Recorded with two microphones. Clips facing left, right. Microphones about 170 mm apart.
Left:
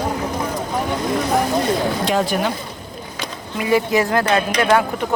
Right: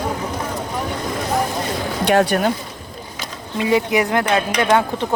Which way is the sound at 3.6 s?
20° right (ahead or behind).